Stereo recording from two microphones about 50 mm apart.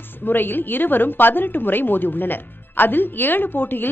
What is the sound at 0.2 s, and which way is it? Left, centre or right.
A woman's voice, left.